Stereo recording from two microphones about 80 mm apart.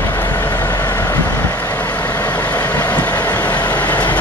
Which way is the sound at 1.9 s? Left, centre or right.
Centre.